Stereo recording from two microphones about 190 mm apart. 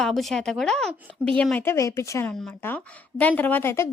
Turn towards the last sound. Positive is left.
turn(degrees=10)  # may be behind; listen again after turning